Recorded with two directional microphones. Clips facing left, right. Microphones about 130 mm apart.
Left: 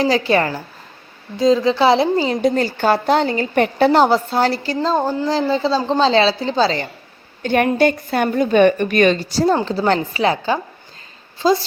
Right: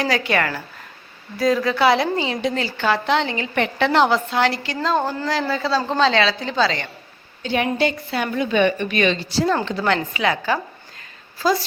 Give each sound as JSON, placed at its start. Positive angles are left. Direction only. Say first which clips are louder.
{"t": 0.0, "sound": "a woman's voice", "louder": "left 5 dB", "side_deg": 30}
{"t": 2.2, "sound": "a woman's voice", "louder": "left 6 dB", "side_deg": 45}
{"t": 4.9, "sound": "a woman's voice", "louder": "left 4 dB", "side_deg": 20}
{"t": 7.4, "sound": "a woman's voice", "louder": "left 5 dB", "side_deg": 50}